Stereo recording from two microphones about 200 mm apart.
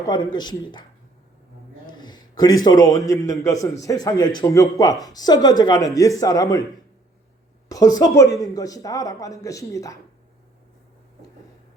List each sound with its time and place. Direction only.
0.0 s speech: 20° left (ahead or behind)
1.9 s a sound: 20° left (ahead or behind)
2.6 s speech: 20° left (ahead or behind)
7.7 s speech: 15° left (ahead or behind)